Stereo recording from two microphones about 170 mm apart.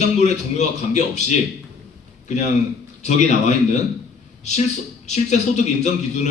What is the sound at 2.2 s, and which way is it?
A man's voice, 45° left (ahead or behind).